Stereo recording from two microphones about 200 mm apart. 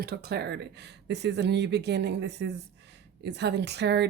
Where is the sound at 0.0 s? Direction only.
50° right (ahead or behind).